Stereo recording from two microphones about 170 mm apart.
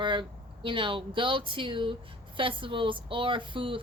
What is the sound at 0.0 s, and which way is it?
Speech, 25° right (ahead or behind).